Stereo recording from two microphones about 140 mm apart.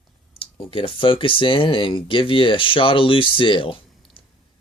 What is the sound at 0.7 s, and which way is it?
Speech, 40° left (ahead or behind).